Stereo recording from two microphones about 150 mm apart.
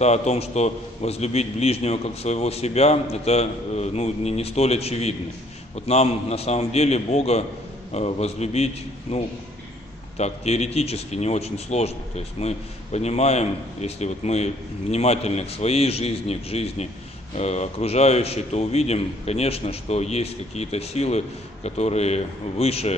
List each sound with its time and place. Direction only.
0.0 s a man's voice: 45° left (ahead or behind)